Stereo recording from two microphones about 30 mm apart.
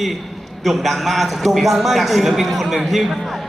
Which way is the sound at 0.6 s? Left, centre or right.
Centre.